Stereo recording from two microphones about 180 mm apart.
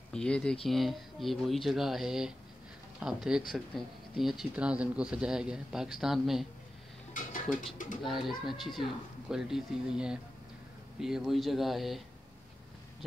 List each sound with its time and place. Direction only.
0.1 s speech: 5° left (ahead or behind)
7.2 s a sound: 50° left (ahead or behind)
7.7 s speech: 45° left (ahead or behind)
8.0 s speech: centre (ahead or behind)